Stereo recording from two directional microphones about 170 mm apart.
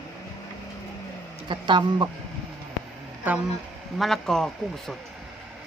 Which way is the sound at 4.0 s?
Centre (ahead or behind).